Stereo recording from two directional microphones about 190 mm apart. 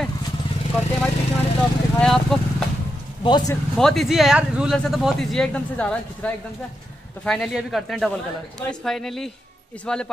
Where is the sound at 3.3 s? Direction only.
20° left (ahead or behind).